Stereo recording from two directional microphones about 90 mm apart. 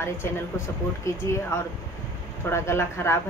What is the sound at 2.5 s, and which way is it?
Speech, 30° left (ahead or behind).